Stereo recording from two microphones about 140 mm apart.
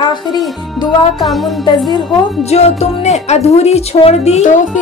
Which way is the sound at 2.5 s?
50° left (ahead or behind).